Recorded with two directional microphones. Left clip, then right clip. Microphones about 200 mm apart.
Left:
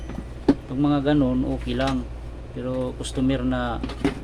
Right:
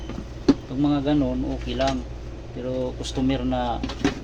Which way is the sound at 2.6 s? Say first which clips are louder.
Even; 15° left (ahead or behind).